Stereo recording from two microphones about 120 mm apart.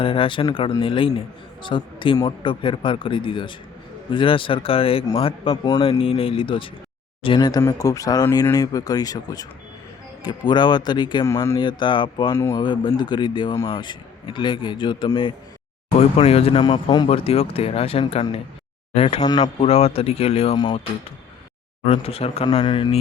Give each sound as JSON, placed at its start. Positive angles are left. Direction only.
{"t": 0.0, "sound": "a man's voice", "side_deg": 50}
{"t": 12.3, "sound": "speech", "side_deg": 25}
{"t": 12.6, "sound": "a man's voice", "side_deg": 40}
{"t": 16.0, "sound": "a man's voice", "side_deg": 55}
{"t": 17.1, "sound": "a man's voice", "side_deg": 55}
{"t": 19.2, "sound": "speech", "side_deg": 35}
{"t": 19.5, "sound": "speech", "side_deg": 60}
{"t": 21.8, "sound": "speech", "side_deg": 55}
{"t": 22.6, "sound": "a man's voice", "side_deg": 40}